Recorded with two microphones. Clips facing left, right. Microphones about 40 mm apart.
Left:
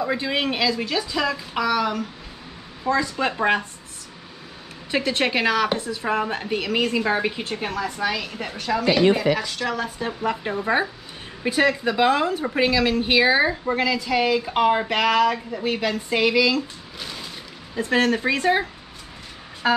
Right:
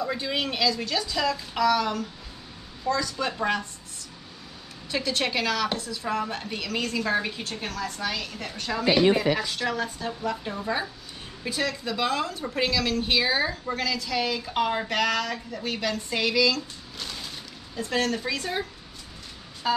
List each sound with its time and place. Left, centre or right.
0.0 s speech: left
2.8 s speech: left
4.9 s speech: left
8.5 s speech: centre
9.9 s speech: left; by 17.3 s centre
17.7 s speech: left
19.6 s vehicle: left